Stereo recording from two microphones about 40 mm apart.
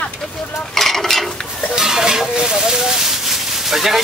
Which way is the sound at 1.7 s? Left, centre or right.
Centre.